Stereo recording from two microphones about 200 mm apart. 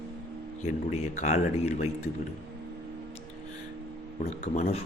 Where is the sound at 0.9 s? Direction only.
35° left (ahead or behind).